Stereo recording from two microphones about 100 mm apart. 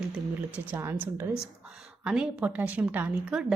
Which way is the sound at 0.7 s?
20° right (ahead or behind).